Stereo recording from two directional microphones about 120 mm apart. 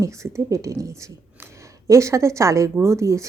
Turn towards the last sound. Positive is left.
turn(degrees=-25)  # may be behind; listen again after turning